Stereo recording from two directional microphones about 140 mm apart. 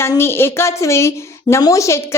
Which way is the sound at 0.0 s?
15° left (ahead or behind).